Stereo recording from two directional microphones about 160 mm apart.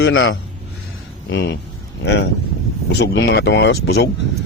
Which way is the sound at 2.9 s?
90° left.